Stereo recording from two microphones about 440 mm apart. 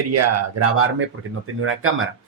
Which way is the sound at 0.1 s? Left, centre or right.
Right.